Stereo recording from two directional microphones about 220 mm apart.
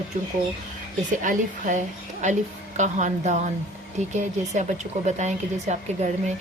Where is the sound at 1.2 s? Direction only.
35° right (ahead or behind).